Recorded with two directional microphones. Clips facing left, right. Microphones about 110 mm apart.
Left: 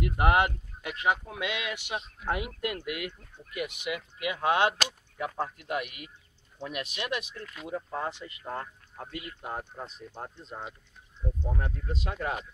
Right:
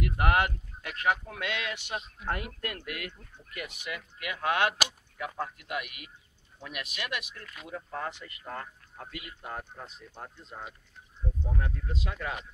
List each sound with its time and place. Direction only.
0.0 s speech: 20° left (ahead or behind)